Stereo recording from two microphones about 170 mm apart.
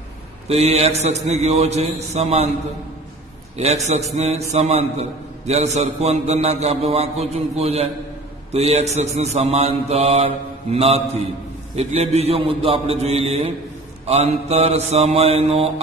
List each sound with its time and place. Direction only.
0.5 s mantra: 40° right (ahead or behind)
3.5 s mantra: 40° right (ahead or behind)